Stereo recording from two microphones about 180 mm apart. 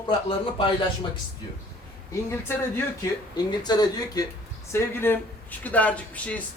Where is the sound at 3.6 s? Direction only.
20° left (ahead or behind).